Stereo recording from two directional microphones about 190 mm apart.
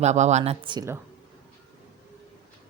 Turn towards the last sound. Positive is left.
turn(degrees=-25)  # may be behind; listen again after turning